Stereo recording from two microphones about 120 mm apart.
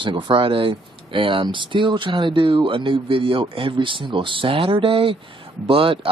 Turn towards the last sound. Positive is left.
turn(degrees=-50)  # may be behind; listen again after turning